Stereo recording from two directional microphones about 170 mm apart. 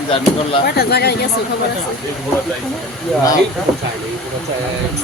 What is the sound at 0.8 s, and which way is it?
Speech, 70° left (ahead or behind).